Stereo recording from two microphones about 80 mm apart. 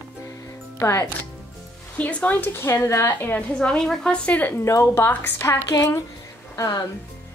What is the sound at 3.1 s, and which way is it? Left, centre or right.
Speech, left.